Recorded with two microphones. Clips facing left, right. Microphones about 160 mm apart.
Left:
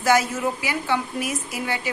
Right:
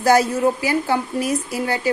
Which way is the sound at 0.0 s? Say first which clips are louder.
Right 5 dB; 40° right (ahead or behind).